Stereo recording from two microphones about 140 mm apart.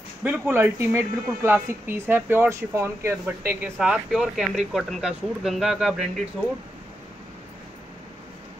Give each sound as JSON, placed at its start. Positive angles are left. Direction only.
{"t": 0.2, "sound": "speech", "side_deg": -15}
{"t": 3.7, "sound": "speech", "side_deg": 0}